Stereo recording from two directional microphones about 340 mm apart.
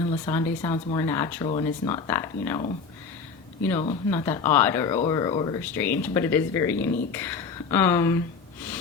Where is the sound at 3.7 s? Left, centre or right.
Centre.